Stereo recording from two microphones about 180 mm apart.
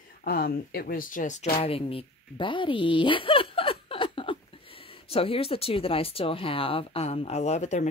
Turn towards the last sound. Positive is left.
turn(degrees=40)  # may be behind; listen again after turning